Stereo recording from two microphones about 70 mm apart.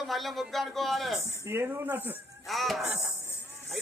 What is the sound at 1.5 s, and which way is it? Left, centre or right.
Speech, right.